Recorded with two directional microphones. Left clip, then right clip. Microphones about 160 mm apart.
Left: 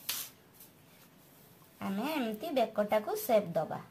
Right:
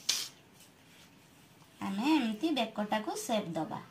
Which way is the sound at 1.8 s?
65° left (ahead or behind).